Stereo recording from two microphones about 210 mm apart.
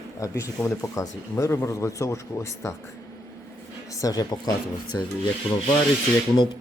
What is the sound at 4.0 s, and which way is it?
Speech, 15° left (ahead or behind).